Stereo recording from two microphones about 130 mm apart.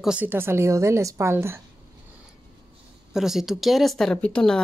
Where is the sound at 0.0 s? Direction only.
10° right (ahead or behind).